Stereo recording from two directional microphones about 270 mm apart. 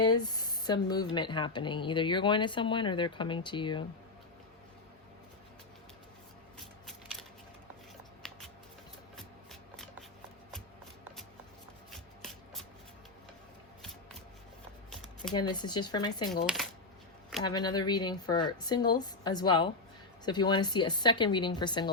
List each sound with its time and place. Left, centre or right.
0.0 s speech: centre
9.1 s shuffling cards: centre
11.9 s shuffling cards: centre
15.3 s speech: centre
17.4 s speech: centre